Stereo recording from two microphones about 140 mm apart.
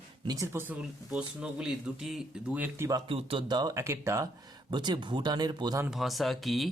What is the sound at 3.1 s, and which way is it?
Speech, 40° right (ahead or behind).